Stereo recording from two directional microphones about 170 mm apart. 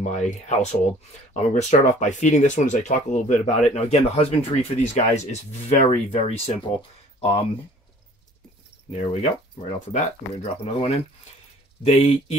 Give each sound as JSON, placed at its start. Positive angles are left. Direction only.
{"t": 0.0, "sound": "speech", "side_deg": 45}
{"t": 9.9, "sound": "speech", "side_deg": 40}